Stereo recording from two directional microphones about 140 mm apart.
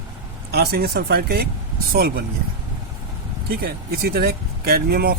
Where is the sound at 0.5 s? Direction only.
90° right.